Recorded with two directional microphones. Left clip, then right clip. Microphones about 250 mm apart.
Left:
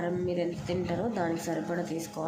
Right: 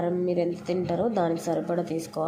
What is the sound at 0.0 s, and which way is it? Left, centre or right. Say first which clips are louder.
A woman's voice: right 5 dB; centre.